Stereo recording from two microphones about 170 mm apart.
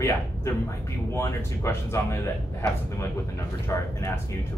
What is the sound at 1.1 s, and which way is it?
Speech, 15° left (ahead or behind).